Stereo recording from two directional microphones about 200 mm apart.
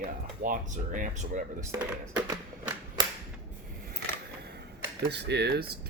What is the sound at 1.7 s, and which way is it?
Speech, 15° right (ahead or behind).